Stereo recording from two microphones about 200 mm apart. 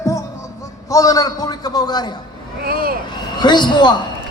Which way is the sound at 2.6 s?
50° right (ahead or behind).